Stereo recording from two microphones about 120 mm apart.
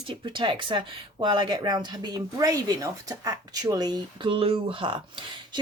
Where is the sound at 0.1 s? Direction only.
40° right (ahead or behind).